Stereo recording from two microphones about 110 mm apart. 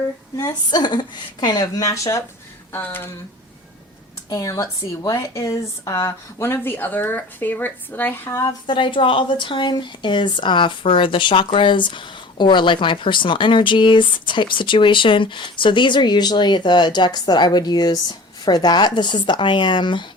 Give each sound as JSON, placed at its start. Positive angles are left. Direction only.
{"t": 0.3, "sound": "a woman's voice", "side_deg": 35}
{"t": 2.7, "sound": "speech", "side_deg": 20}
{"t": 4.3, "sound": "speech", "side_deg": 35}
{"t": 8.6, "sound": "speech", "side_deg": 50}